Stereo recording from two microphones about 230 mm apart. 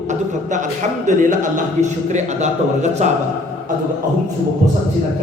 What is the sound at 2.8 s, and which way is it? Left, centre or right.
Speech, right.